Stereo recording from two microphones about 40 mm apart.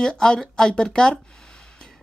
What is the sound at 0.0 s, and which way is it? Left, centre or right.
Speech, centre.